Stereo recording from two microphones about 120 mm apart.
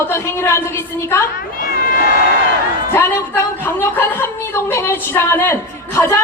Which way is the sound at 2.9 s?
20° left (ahead or behind).